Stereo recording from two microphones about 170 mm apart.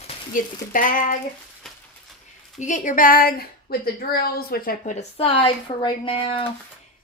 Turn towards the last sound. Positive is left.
turn(degrees=35)  # may be behind; listen again after turning